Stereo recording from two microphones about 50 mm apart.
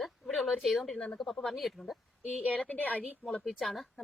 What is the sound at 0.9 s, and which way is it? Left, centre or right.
Speech, left.